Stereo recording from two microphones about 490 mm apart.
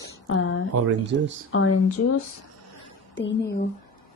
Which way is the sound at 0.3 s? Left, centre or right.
Left.